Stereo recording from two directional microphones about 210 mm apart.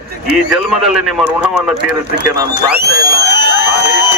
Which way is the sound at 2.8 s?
50° right (ahead or behind).